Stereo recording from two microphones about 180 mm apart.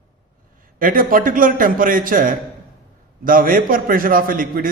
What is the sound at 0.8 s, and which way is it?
A man's voice, 50° right (ahead or behind).